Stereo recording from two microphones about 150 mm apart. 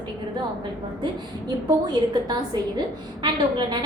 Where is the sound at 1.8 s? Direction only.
30° right (ahead or behind).